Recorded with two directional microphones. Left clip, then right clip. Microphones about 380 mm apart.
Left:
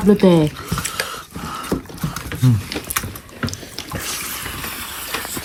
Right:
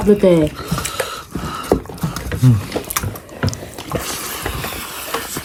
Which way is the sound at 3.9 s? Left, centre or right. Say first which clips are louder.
Right 3 dB; centre.